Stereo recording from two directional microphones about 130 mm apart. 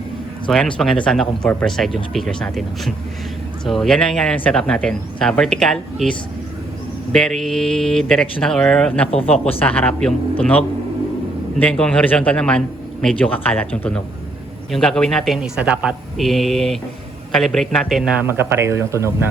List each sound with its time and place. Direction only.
0.5 s a man's voice: centre (ahead or behind)
18.3 s speech: 20° right (ahead or behind)